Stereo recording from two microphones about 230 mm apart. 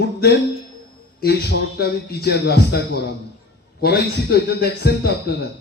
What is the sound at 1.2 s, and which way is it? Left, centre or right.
A man's voice, left.